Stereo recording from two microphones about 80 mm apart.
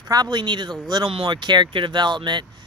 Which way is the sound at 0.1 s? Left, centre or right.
Right.